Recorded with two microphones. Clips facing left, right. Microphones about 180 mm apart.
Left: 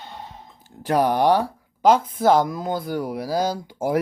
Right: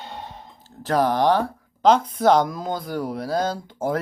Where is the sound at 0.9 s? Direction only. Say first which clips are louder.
Left 1 dB; 10° left (ahead or behind).